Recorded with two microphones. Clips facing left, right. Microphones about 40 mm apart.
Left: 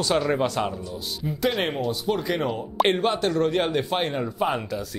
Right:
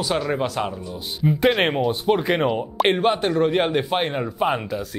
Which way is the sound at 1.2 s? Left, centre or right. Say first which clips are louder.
Right 7 dB; right.